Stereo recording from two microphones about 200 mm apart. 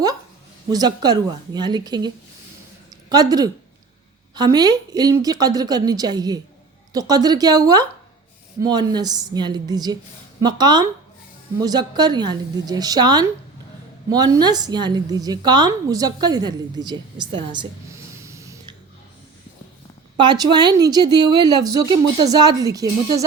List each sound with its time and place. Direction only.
0.7 s a woman's voice: 20° right (ahead or behind)
18.2 s a sound: 15° right (ahead or behind)
20.1 s a woman's voice: 20° right (ahead or behind)